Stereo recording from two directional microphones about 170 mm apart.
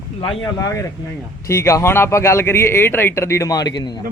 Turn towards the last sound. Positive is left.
turn(degrees=25)  # may be behind; listen again after turning